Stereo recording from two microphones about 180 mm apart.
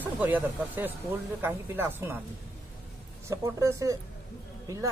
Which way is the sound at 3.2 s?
15° right (ahead or behind).